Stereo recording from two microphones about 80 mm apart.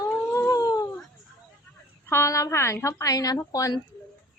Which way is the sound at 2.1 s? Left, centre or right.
Left.